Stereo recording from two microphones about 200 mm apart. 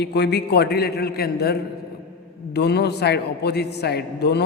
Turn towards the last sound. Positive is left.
turn(degrees=55)  # may be behind; listen again after turning